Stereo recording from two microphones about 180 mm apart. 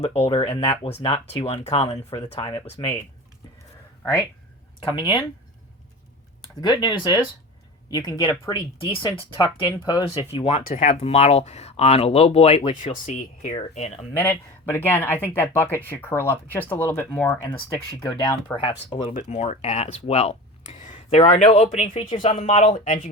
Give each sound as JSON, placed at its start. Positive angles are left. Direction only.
{"t": 0.0, "sound": "speech", "side_deg": 35}
{"t": 4.8, "sound": "speech", "side_deg": 30}
{"t": 6.6, "sound": "speech", "side_deg": 25}
{"t": 10.7, "sound": "speech", "side_deg": 45}
{"t": 10.9, "sound": "speech", "side_deg": 35}
{"t": 13.1, "sound": "speech", "side_deg": 45}
{"t": 14.2, "sound": "speech", "side_deg": 15}
{"t": 18.5, "sound": "speech", "side_deg": 25}
{"t": 19.0, "sound": "speech", "side_deg": 40}
{"t": 22.1, "sound": "speech", "side_deg": 30}